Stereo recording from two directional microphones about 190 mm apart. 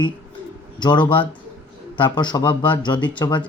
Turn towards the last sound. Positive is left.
turn(degrees=25)  # may be behind; listen again after turning